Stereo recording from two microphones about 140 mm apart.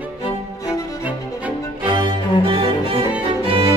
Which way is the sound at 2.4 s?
40° right (ahead or behind).